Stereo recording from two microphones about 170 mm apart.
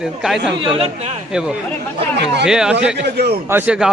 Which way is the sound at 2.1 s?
90° right.